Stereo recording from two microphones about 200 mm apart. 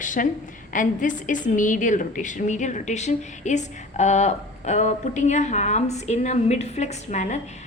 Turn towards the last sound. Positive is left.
turn(degrees=35)  # may be behind; listen again after turning